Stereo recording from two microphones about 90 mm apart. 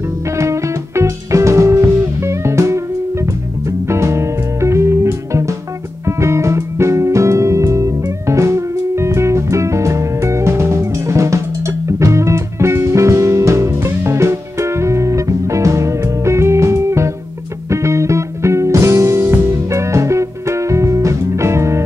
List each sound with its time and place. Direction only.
0.4 s music: 35° right (ahead or behind)
3.8 s music: 30° right (ahead or behind)